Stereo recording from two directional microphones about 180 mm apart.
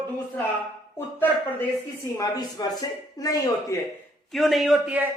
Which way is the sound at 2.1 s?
20° left (ahead or behind).